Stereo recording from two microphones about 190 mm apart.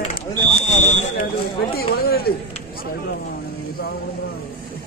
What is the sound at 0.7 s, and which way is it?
Speech, 40° left (ahead or behind).